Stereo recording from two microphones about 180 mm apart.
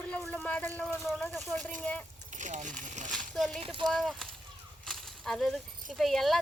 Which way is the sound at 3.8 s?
Centre (ahead or behind).